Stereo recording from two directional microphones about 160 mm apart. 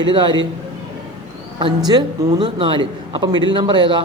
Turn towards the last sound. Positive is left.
turn(degrees=-30)  # may be behind; listen again after turning